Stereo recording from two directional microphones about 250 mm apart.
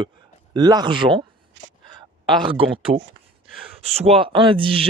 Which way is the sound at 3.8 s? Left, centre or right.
Right.